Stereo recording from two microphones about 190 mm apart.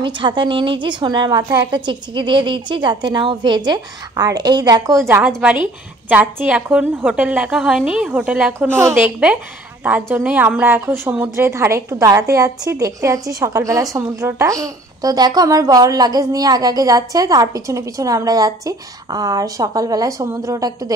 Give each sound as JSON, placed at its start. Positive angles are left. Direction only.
{"t": 0.0, "sound": "a woman's voice", "side_deg": -25}